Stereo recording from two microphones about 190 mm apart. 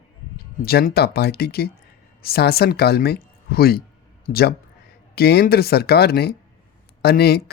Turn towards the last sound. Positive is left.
turn(degrees=55)  # may be behind; listen again after turning